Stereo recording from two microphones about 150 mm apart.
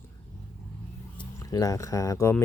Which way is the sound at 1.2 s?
25° left (ahead or behind).